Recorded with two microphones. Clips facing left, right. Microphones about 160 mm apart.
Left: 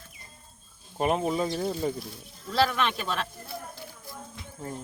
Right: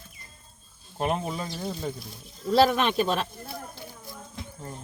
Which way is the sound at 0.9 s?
Centre (ahead or behind).